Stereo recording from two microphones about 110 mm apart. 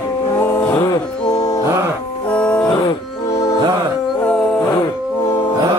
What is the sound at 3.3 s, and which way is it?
Music, 30° left (ahead or behind).